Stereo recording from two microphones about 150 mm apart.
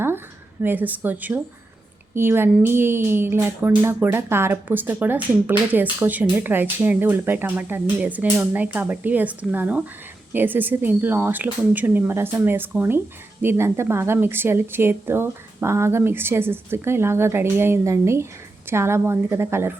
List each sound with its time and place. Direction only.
0.6 s a woman's voice: 10° right (ahead or behind)